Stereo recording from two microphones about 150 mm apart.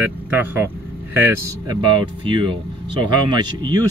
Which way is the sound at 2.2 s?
35° right (ahead or behind).